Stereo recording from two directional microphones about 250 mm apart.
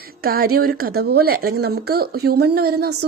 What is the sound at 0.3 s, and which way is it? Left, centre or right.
Speech, right.